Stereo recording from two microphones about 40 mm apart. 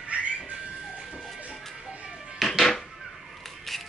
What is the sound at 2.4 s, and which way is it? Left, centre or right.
Music, centre.